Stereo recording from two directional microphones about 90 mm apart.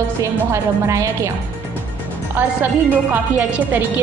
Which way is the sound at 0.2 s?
35° right (ahead or behind).